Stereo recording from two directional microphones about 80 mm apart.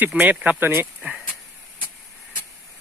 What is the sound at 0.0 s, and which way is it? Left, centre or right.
Speech, centre.